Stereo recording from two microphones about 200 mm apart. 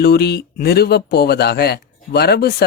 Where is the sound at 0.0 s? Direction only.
55° left (ahead or behind).